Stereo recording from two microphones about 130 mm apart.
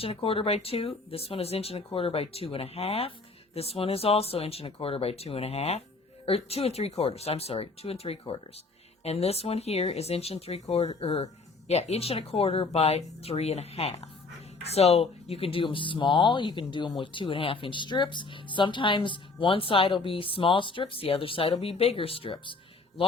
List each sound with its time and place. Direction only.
0.0 s speech: 45° left (ahead or behind)